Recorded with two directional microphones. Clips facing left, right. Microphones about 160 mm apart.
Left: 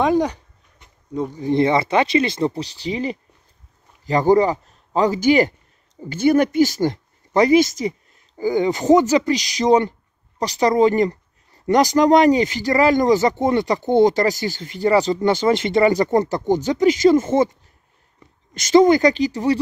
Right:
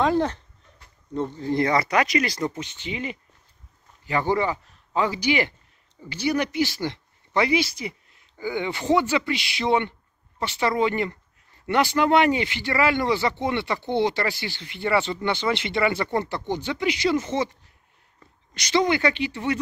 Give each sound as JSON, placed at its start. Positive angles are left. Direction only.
{"t": 0.0, "sound": "speech", "side_deg": 15}
{"t": 18.5, "sound": "speech", "side_deg": 45}